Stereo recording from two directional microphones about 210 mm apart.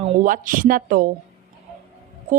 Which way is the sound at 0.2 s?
40° right (ahead or behind).